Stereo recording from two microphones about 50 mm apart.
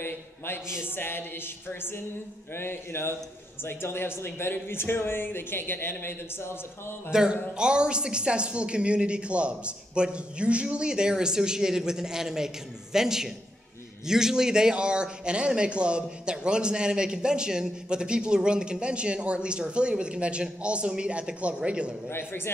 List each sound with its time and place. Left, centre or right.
0.8 s speech: left
7.1 s a woman's voice: centre
22.1 s speech: left